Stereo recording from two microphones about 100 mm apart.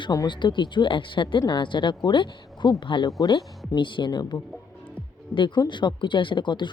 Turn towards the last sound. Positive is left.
turn(degrees=50)  # may be behind; listen again after turning